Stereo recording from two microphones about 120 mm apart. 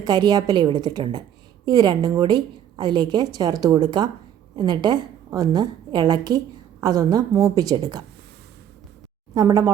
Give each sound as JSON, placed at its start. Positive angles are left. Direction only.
{"t": 0.0, "sound": "a woman's voice", "side_deg": -35}
{"t": 9.3, "sound": "speech", "side_deg": -30}